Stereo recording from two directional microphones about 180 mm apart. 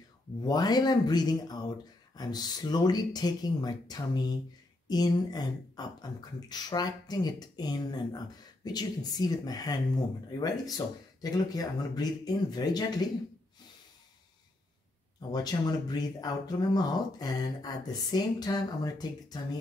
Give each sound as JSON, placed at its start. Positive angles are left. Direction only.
{"t": 0.4, "sound": "speech", "side_deg": 20}
{"t": 15.3, "sound": "speech", "side_deg": 20}